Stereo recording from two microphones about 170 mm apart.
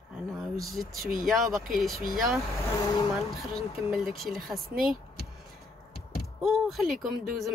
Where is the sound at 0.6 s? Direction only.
Centre (ahead or behind).